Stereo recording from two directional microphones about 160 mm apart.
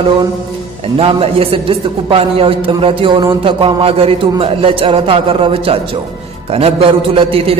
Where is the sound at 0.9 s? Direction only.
35° right (ahead or behind).